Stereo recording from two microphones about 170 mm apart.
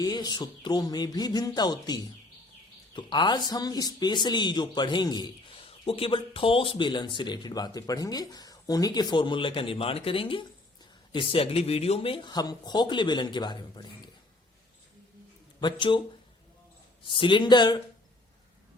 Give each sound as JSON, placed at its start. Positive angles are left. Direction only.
{"t": 0.0, "sound": "a man's voice", "side_deg": 25}
{"t": 15.6, "sound": "a man's voice", "side_deg": 30}
{"t": 17.0, "sound": "a man's voice", "side_deg": 30}